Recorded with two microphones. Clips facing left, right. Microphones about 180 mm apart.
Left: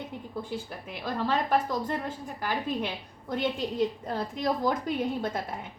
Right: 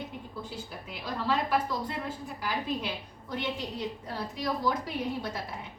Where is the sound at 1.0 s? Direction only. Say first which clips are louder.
Left 2 dB; 45° left (ahead or behind).